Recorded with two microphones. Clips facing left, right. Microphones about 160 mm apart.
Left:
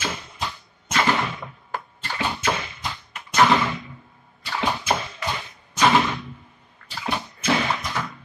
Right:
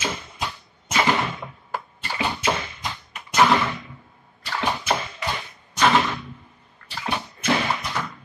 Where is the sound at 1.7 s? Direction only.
10° right (ahead or behind).